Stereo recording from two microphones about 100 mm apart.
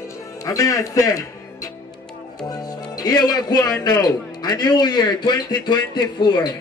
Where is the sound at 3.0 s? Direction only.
45° left (ahead or behind).